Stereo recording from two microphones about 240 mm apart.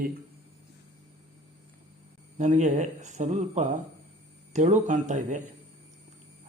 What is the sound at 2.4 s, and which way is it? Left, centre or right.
Speech, right.